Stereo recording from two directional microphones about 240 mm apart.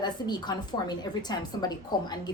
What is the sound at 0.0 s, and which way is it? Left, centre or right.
A woman's voice, centre.